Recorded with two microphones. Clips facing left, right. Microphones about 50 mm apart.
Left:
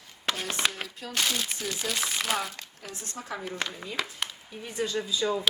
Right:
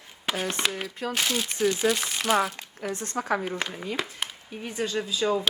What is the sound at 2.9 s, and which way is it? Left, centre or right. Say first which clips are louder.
Speech: right 6 dB; right.